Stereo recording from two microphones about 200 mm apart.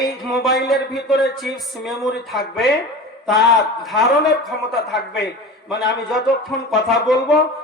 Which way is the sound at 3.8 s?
Centre (ahead or behind).